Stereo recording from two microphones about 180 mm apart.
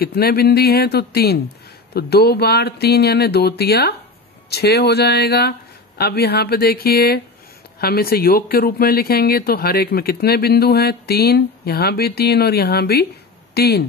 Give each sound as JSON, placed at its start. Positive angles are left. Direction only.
{"t": 0.0, "sound": "speech", "side_deg": 60}